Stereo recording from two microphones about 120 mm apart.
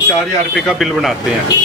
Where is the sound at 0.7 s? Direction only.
Centre (ahead or behind).